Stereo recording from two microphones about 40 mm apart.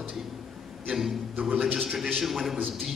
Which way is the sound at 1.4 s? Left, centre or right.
Right.